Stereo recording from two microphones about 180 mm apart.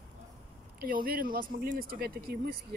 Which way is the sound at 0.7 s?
55° right (ahead or behind).